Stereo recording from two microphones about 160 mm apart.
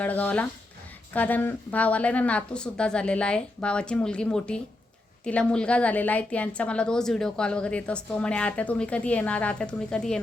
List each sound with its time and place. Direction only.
0.0 s a woman's voice: 10° left (ahead or behind)